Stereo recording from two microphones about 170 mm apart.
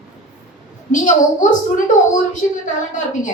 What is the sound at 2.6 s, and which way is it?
Speech, 45° left (ahead or behind).